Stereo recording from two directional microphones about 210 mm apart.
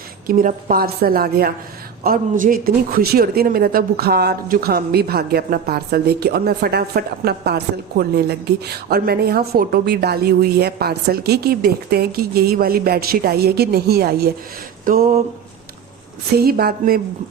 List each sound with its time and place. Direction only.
0.3 s speech: 40° right (ahead or behind)
16.4 s speech: 45° right (ahead or behind)